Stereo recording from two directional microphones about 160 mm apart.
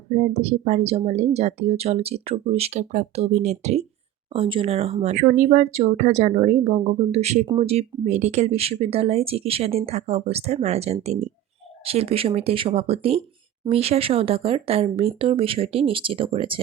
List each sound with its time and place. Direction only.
0.1 s speech: 45° right (ahead or behind)
4.3 s speech: 35° right (ahead or behind)
5.1 s speech: 50° right (ahead or behind); by 16.6 s 35° right (ahead or behind)